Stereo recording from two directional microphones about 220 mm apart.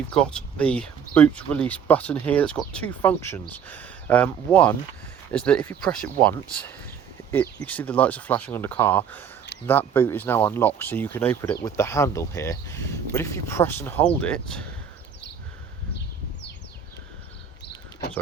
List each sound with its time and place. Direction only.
0.1 s speech: 5° left (ahead or behind)